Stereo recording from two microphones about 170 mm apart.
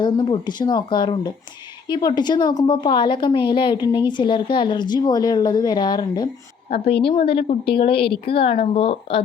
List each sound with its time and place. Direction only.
0.0 s a woman's voice: 25° left (ahead or behind)